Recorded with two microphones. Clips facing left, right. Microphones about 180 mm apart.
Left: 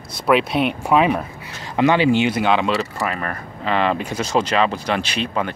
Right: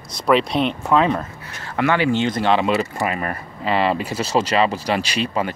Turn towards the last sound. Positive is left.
turn(degrees=-5)  # may be behind; listen again after turning